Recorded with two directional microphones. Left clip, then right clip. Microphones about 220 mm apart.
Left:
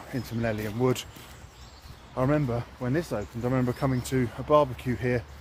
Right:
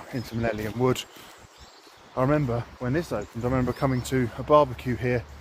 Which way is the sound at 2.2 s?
5° right (ahead or behind).